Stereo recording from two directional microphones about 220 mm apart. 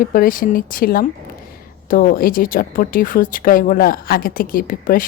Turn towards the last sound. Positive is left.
turn(degrees=40)  # may be behind; listen again after turning